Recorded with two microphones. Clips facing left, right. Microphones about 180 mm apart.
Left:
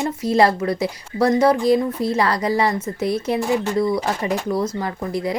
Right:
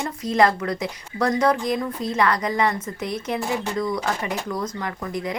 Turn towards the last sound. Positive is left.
turn(degrees=30)  # may be behind; listen again after turning